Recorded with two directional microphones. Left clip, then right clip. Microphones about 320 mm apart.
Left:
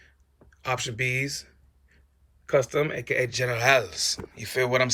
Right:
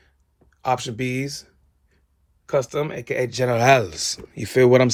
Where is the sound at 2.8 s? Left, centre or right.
Centre.